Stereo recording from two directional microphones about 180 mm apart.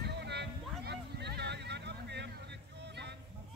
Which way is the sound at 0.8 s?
65° right (ahead or behind).